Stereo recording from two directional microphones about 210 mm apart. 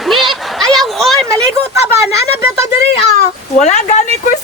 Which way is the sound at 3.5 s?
30° left (ahead or behind).